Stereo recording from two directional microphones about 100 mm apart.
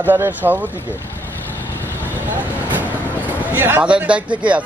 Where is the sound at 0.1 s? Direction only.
20° right (ahead or behind).